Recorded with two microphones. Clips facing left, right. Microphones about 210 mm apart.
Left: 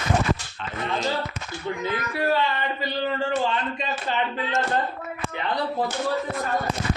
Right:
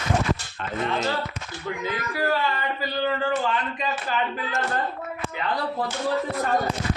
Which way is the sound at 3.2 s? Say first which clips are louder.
Even; 25° left (ahead or behind).